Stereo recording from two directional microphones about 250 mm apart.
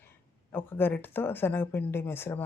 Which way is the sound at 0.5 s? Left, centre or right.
Centre.